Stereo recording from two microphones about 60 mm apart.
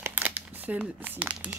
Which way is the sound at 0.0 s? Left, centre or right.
Right.